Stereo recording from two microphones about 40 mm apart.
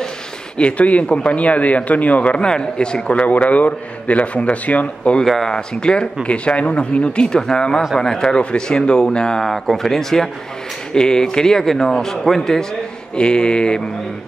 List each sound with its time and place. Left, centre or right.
0.6 s speech: left
2.4 s speech: left
3.1 s speech: left
5.2 s a man's voice: centre
5.5 s a man's voice: left
9.4 s a man's voice: centre
13.1 s speech: left